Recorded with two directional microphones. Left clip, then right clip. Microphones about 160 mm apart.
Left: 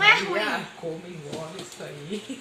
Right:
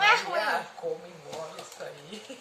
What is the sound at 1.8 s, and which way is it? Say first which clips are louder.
Speech: even; 30° left (ahead or behind).